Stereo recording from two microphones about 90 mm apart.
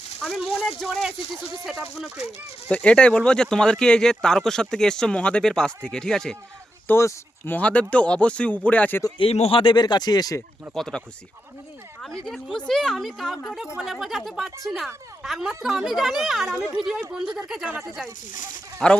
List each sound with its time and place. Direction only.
0.2 s speech: 5° left (ahead or behind)
1.6 s speech: 5° right (ahead or behind)
2.6 s speech: 15° left (ahead or behind)
6.8 s speech: 25° left (ahead or behind)
9.1 s speech: 85° left
9.7 s speech: 50° left (ahead or behind)
10.8 s a woman's voice: 5° left (ahead or behind)
18.8 s speech: 5° left (ahead or behind)